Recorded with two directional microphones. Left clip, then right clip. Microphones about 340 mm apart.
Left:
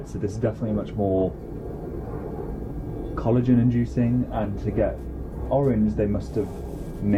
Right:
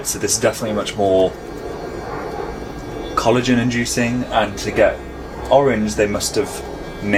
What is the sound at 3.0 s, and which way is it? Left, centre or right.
Speech, centre.